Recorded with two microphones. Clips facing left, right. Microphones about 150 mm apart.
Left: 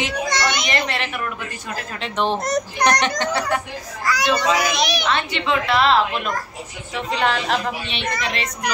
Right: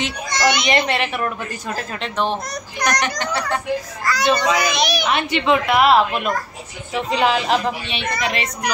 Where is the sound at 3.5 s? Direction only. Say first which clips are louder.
Right 3 dB; 10° left (ahead or behind).